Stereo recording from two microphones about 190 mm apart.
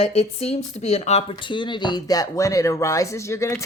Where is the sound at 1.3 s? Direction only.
25° left (ahead or behind).